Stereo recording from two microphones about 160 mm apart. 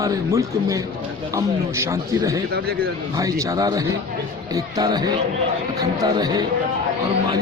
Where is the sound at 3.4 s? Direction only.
20° right (ahead or behind).